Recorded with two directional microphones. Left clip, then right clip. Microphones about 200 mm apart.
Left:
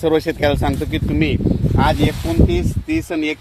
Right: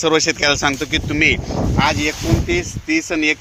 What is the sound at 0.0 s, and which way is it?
Speech, 25° left (ahead or behind).